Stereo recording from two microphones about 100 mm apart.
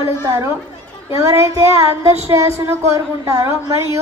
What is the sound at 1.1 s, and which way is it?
Child singing, 30° right (ahead or behind).